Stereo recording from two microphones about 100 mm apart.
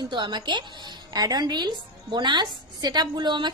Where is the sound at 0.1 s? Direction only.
50° right (ahead or behind).